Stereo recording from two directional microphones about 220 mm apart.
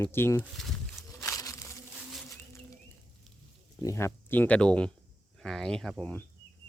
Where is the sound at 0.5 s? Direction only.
Centre (ahead or behind).